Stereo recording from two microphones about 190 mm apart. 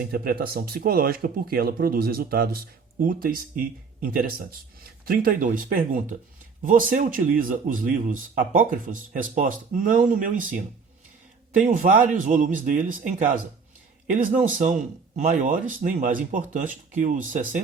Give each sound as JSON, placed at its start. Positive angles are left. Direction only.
{"t": 0.0, "sound": "speech", "side_deg": -50}